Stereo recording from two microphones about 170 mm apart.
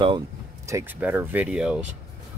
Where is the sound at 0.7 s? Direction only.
15° right (ahead or behind).